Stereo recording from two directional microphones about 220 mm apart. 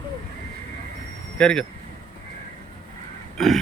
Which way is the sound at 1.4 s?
5° left (ahead or behind).